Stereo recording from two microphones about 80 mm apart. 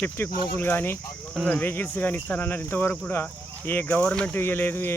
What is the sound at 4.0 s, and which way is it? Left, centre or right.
Speech, centre.